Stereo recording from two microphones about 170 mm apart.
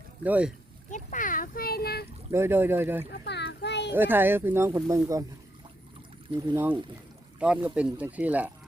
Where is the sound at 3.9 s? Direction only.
10° right (ahead or behind).